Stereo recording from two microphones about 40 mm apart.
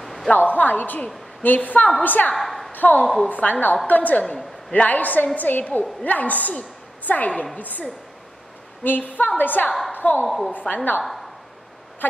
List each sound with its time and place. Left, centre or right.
0.0 s a sound: centre
0.3 s a woman's voice: left
2.3 s a woman's voice: centre
2.7 s a sound: left
3.3 s a woman's voice: left
4.2 s a woman's voice: centre
4.7 s a woman's voice: left
7.5 s a woman's voice: left
8.8 s a woman's voice: left
10.2 s a woman's voice: centre
10.5 s a woman's voice: left
12.0 s a sound: left